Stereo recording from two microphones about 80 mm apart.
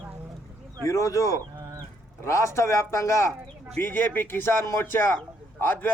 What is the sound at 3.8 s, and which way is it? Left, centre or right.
A man's voice, left.